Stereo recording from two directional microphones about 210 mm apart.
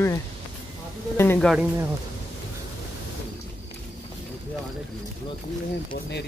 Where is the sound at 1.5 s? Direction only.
5° right (ahead or behind).